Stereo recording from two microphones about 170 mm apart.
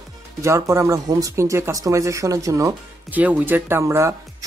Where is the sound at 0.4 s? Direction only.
15° right (ahead or behind).